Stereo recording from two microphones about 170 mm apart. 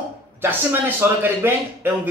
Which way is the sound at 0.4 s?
10° right (ahead or behind).